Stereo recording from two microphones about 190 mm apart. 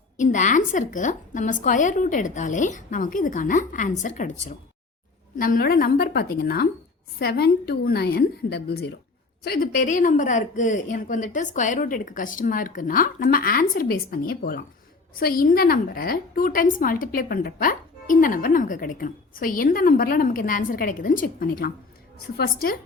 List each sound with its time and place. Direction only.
0.2 s a woman's voice: 40° left (ahead or behind)